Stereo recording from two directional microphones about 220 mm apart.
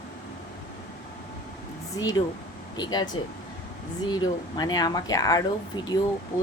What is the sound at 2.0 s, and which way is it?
Speech, 15° left (ahead or behind).